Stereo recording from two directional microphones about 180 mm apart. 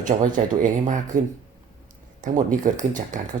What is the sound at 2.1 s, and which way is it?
Speech, 45° right (ahead or behind).